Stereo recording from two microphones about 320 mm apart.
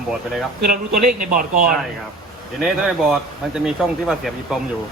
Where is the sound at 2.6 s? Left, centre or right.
Centre.